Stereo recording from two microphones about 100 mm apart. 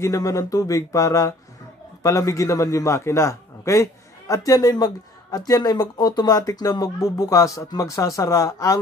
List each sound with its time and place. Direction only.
0.0 s a man's voice: 35° left (ahead or behind)